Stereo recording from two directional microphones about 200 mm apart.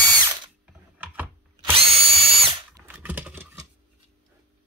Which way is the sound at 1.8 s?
30° right (ahead or behind).